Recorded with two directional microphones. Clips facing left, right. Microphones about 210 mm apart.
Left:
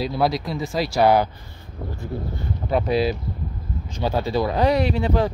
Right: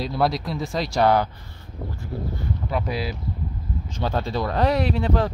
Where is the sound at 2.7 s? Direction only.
25° left (ahead or behind).